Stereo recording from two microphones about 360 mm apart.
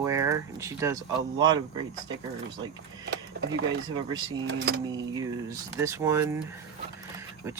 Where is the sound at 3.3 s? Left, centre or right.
Right.